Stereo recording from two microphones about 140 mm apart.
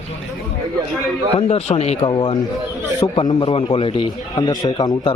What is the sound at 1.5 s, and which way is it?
Speech, 50° left (ahead or behind).